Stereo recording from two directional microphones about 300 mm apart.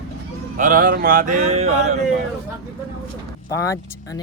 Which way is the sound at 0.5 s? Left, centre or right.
Right.